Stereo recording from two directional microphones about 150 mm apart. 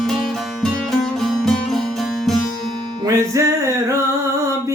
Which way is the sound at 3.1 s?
20° right (ahead or behind).